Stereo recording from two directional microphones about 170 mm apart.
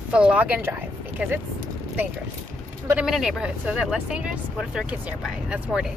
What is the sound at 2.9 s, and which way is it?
Speech, 5° right (ahead or behind).